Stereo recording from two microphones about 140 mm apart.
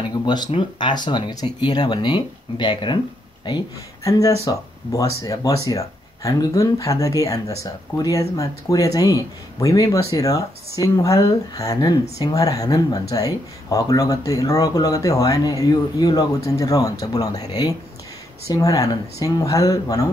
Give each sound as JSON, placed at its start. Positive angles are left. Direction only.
{"t": 0.2, "sound": "speech", "side_deg": 30}